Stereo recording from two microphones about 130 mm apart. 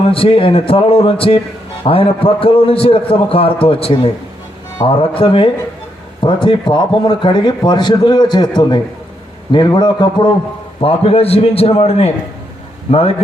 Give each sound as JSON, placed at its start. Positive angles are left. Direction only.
{"t": 0.1, "sound": "a man's voice", "side_deg": 45}
{"t": 10.8, "sound": "a man's voice", "side_deg": 50}